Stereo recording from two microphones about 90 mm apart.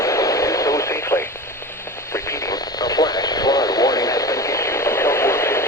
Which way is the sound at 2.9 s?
45° left (ahead or behind).